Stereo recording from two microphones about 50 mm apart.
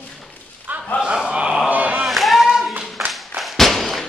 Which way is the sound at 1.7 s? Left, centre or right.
Right.